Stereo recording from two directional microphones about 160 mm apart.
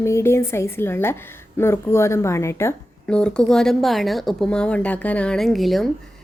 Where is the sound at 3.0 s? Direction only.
5° left (ahead or behind).